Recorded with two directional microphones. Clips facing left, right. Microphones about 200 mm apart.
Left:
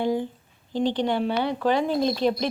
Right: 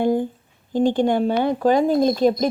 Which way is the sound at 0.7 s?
50° right (ahead or behind).